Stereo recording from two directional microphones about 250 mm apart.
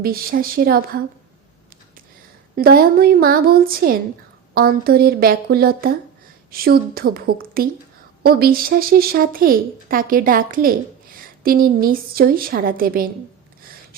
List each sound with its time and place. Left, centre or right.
0.0 s a woman's voice: right
2.6 s a woman's voice: right